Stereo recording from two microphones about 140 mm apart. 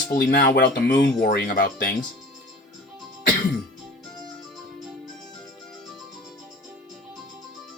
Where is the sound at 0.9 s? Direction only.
75° left (ahead or behind).